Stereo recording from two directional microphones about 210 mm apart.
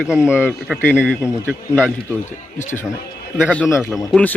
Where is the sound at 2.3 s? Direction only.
35° left (ahead or behind).